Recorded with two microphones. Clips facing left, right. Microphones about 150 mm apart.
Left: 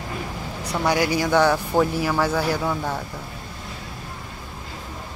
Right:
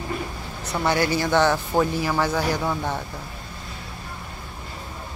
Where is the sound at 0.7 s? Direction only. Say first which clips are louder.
Left 1 dB; 10° left (ahead or behind).